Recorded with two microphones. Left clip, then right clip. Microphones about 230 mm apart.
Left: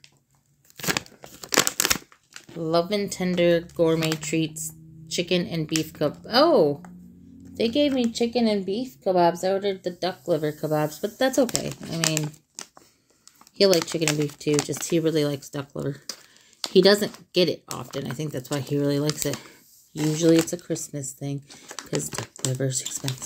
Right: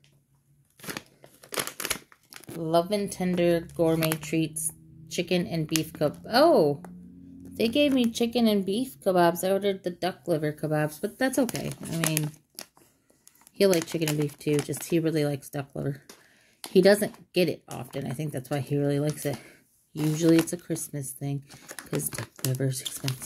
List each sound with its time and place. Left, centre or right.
0.7 s a sound: left
2.6 s a woman's voice: centre
12.2 s crumpling: centre
13.6 s speech: centre